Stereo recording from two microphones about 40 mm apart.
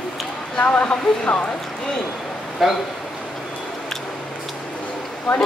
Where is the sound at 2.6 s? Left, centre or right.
Centre.